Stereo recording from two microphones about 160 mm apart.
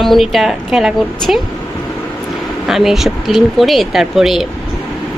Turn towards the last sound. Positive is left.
turn(degrees=0)  # may be behind; listen again after turning